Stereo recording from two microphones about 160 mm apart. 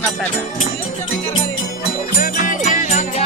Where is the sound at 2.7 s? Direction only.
50° left (ahead or behind).